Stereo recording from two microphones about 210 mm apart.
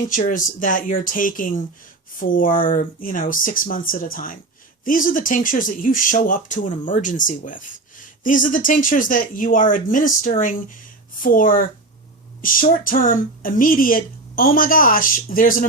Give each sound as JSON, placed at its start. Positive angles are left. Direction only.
{"t": 0.1, "sound": "speech", "side_deg": 40}